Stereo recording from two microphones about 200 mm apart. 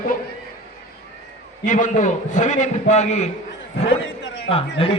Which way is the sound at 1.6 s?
40° left (ahead or behind).